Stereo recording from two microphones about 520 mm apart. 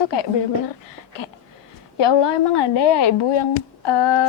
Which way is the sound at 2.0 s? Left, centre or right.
Left.